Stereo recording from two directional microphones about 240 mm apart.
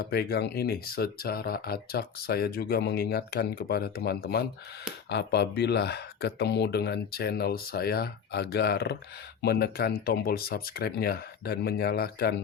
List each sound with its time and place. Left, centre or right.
0.0 s speech: left